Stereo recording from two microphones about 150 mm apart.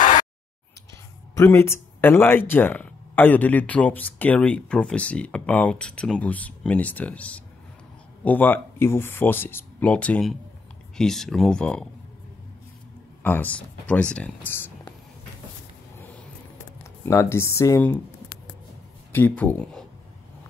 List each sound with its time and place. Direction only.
1.3 s speech: 15° left (ahead or behind)
13.2 s speech: 10° left (ahead or behind)
17.0 s speech: 15° left (ahead or behind)
19.1 s speech: 10° left (ahead or behind)